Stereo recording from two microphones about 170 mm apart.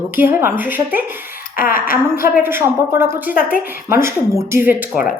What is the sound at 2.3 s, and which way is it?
A woman's voice, 15° right (ahead or behind).